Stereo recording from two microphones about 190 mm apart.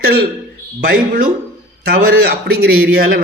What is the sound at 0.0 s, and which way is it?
A man's voice, 55° right (ahead or behind).